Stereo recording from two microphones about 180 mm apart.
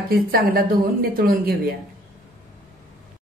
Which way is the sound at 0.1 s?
55° right (ahead or behind).